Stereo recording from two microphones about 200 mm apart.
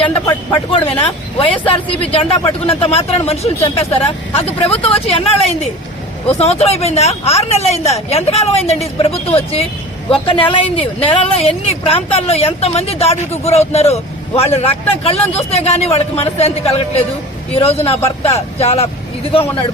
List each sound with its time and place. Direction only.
0.0 s a woman's voice: 25° left (ahead or behind)